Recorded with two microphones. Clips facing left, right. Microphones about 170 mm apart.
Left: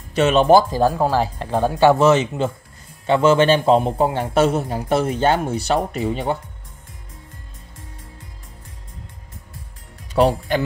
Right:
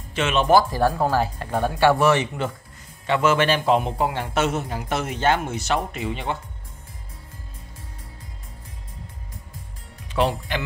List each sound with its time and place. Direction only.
0.1 s a man's voice: 40° left (ahead or behind)
10.1 s speech: 40° left (ahead or behind)